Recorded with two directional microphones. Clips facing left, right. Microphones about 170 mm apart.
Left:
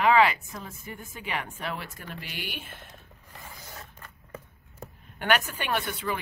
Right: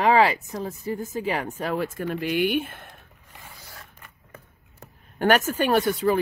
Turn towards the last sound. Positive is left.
turn(degrees=-40)  # may be behind; listen again after turning